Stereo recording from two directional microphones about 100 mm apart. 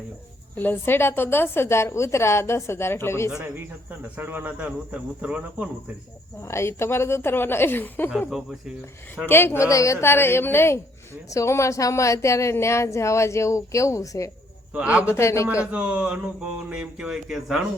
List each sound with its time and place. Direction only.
0.5 s a woman's voice: 20° left (ahead or behind)
4.2 s a sound: 20° right (ahead or behind)
6.5 s a woman's voice: 25° left (ahead or behind)
9.2 s a woman's voice: 25° left (ahead or behind)
14.7 s a man's voice: 15° right (ahead or behind)
15.0 s a woman's voice: 25° left (ahead or behind)
15.6 s a sound: 10° right (ahead or behind)